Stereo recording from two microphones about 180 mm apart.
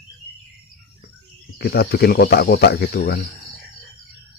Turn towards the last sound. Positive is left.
turn(degrees=65)  # may be behind; listen again after turning